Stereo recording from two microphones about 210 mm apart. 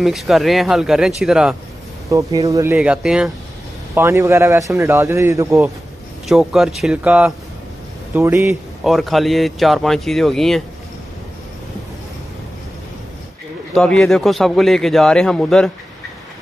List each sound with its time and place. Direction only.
0.0 s speech: centre (ahead or behind)
2.0 s a man's voice: 15° right (ahead or behind)
6.2 s a man's voice: centre (ahead or behind)
8.8 s speech: centre (ahead or behind)
13.7 s speech: 5° left (ahead or behind)